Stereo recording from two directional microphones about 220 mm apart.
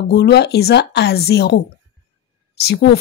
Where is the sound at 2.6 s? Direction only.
50° left (ahead or behind).